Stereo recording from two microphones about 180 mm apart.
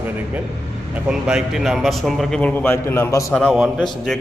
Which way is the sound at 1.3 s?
Centre (ahead or behind).